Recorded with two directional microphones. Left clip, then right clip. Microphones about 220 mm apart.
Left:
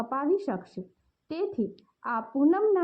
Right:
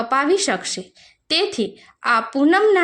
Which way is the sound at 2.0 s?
35° right (ahead or behind).